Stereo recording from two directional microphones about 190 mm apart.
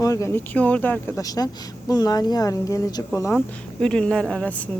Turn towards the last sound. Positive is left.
turn(degrees=5)  # may be behind; listen again after turning